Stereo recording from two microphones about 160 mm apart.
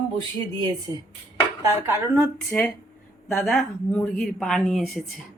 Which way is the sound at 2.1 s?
5° left (ahead or behind).